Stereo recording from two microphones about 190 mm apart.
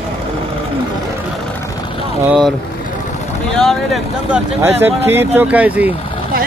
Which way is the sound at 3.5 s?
Centre (ahead or behind).